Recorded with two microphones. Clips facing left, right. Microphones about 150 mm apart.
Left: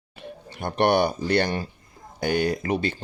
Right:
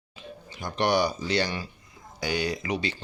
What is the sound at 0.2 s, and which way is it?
Speech, 60° left (ahead or behind).